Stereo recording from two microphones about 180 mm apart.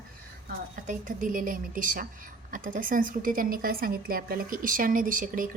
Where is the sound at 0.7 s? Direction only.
45° right (ahead or behind).